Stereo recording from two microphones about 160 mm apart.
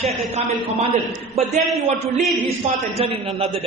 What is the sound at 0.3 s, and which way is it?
A man's voice, 45° right (ahead or behind).